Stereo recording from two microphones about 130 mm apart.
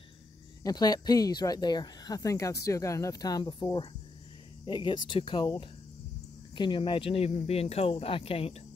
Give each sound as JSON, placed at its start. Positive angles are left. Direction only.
{"t": 0.7, "sound": "speech", "side_deg": 30}